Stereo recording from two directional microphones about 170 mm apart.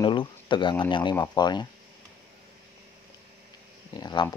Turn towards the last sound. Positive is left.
turn(degrees=25)  # may be behind; listen again after turning